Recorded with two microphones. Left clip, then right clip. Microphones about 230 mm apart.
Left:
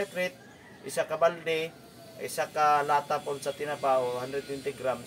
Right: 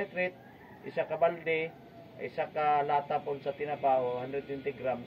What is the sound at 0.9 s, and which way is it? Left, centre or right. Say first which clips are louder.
Speech: left 3 dB; left.